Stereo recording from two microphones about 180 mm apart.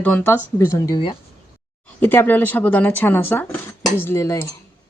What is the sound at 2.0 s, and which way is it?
Speech, 10° left (ahead or behind).